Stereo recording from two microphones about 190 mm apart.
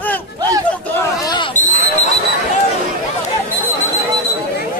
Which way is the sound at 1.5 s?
40° left (ahead or behind).